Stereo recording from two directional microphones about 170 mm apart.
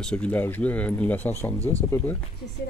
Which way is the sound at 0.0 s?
5° left (ahead or behind).